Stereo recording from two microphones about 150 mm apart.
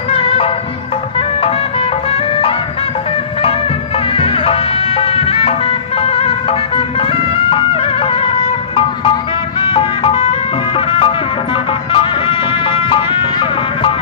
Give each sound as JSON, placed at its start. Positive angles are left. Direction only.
{"t": 0.1, "sound": "music", "side_deg": 40}
{"t": 4.1, "sound": "music", "side_deg": 40}